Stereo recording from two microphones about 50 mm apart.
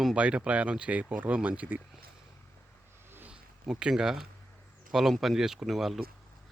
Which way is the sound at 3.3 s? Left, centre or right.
Centre.